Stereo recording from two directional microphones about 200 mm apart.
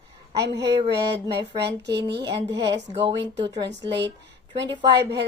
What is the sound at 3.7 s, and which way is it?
Speech, 60° right (ahead or behind).